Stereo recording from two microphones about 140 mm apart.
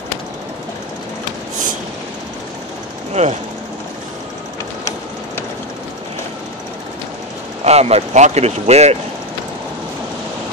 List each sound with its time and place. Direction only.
3.1 s speech: 55° right (ahead or behind)
7.6 s speech: 50° right (ahead or behind)